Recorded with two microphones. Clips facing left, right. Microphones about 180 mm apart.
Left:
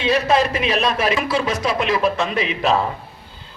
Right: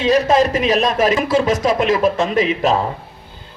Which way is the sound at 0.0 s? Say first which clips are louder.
Right 4 dB; 45° right (ahead or behind).